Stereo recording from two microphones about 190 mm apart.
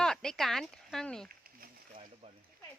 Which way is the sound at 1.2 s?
50° right (ahead or behind).